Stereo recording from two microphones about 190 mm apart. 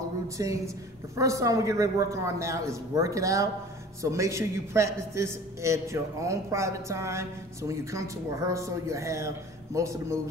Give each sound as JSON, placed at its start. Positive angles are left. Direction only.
{"t": 0.4, "sound": "a woman's voice", "side_deg": -20}